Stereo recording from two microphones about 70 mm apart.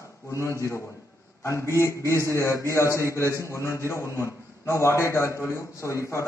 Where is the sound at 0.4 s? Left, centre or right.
Left.